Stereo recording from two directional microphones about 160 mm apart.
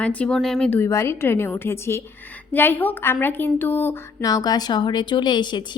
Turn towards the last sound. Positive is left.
turn(degrees=30)  # may be behind; listen again after turning